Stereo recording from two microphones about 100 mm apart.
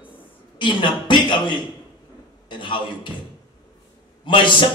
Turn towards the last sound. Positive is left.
turn(degrees=55)  # may be behind; listen again after turning